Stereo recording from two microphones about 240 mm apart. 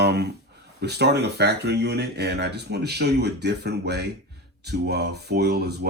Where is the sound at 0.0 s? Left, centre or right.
Right.